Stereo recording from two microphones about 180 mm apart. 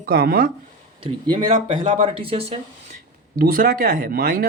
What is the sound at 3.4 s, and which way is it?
Speech, 55° right (ahead or behind).